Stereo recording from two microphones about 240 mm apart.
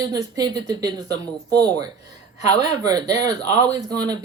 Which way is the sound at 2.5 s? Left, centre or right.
Centre.